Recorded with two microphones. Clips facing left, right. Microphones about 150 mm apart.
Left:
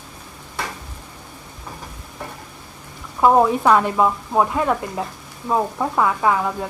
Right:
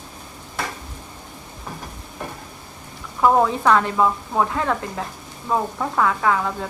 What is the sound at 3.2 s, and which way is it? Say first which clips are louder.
Speech: left 2 dB; 15° left (ahead or behind).